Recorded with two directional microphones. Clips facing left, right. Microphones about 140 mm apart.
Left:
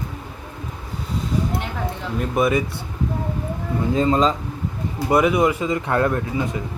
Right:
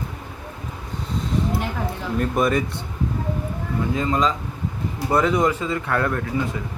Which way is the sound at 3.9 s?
30° left (ahead or behind).